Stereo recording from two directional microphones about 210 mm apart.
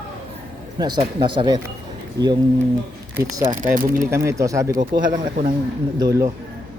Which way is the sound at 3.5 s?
40° right (ahead or behind).